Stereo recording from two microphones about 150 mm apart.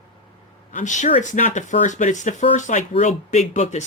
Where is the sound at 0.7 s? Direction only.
55° left (ahead or behind).